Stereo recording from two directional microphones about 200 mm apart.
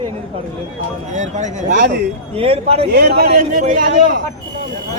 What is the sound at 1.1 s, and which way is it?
A man's voice, 35° right (ahead or behind).